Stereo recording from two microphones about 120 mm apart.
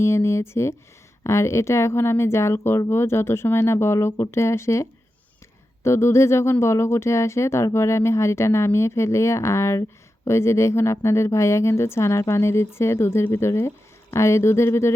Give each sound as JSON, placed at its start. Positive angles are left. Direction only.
{"t": 0.0, "sound": "speech", "side_deg": 20}